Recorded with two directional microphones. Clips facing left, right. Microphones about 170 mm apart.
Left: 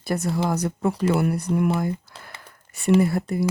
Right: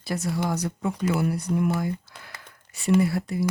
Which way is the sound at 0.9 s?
35° left (ahead or behind).